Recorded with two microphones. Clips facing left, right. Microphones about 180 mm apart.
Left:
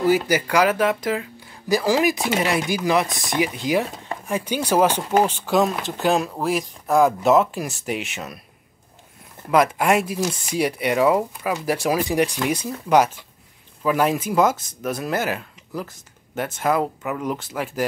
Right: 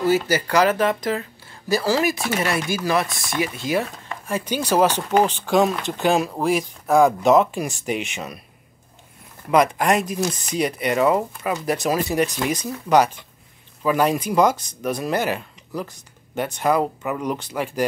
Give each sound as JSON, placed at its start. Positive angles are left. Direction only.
{"t": 0.0, "sound": "speech", "side_deg": 15}
{"t": 9.5, "sound": "speech", "side_deg": 5}